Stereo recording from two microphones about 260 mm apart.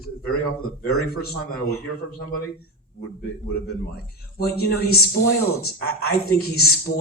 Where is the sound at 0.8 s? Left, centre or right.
Left.